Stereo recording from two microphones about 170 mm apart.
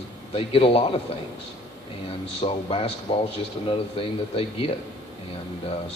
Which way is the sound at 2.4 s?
35° left (ahead or behind).